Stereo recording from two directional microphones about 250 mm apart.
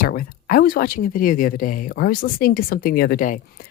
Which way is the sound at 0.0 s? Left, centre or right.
Left.